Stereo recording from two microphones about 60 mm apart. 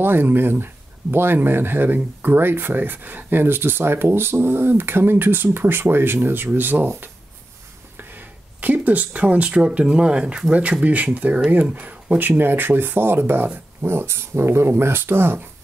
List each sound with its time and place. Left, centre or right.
0.0 s speech: right
12.3 s speech: right